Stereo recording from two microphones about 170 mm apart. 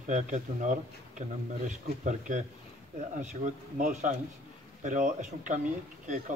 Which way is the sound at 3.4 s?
50° right (ahead or behind).